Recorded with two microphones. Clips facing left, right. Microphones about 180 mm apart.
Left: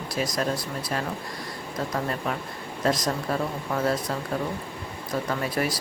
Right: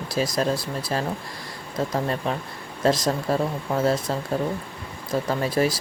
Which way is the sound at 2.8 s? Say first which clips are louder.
Right 4 dB; 25° right (ahead or behind).